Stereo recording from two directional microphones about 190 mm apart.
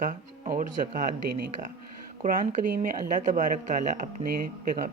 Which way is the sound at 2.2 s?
45° right (ahead or behind).